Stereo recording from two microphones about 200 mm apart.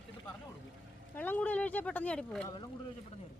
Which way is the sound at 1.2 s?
10° left (ahead or behind).